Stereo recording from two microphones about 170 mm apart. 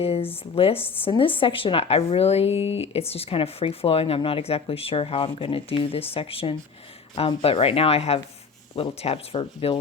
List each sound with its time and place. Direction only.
0.0 s speech: 35° left (ahead or behind)